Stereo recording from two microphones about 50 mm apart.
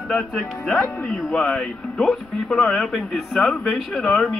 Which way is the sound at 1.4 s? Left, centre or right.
Centre.